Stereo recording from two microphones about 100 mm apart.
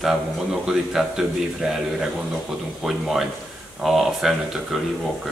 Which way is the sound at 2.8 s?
5° right (ahead or behind).